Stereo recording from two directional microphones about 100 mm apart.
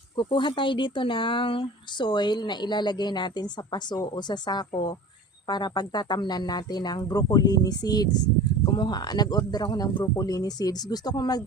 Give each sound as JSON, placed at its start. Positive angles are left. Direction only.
{"t": 0.2, "sound": "speech", "side_deg": 50}